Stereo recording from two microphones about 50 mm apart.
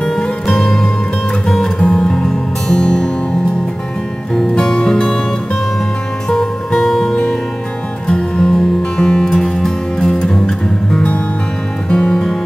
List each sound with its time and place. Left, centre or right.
0.2 s music: centre
1.9 s music: centre
4.4 s music: centre
6.2 s music: centre